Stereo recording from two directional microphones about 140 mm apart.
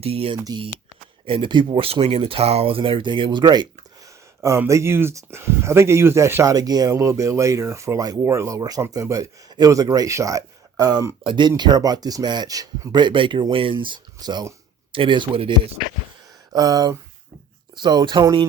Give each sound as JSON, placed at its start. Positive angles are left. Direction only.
{"t": 0.0, "sound": "speech", "side_deg": -45}
{"t": 0.3, "sound": "speech", "side_deg": -25}
{"t": 4.4, "sound": "speech", "side_deg": -20}
{"t": 16.5, "sound": "speech", "side_deg": -25}